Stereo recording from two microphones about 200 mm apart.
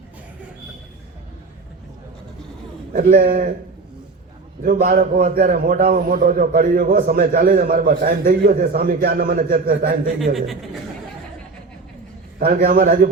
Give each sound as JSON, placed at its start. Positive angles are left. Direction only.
{"t": 2.9, "sound": "a man's voice", "side_deg": -40}
{"t": 4.6, "sound": "a man's voice", "side_deg": -50}
{"t": 10.3, "sound": "a man's voice", "side_deg": 0}
{"t": 12.4, "sound": "a man's voice", "side_deg": -45}